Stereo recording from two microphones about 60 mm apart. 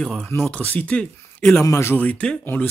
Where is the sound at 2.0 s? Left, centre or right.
Left.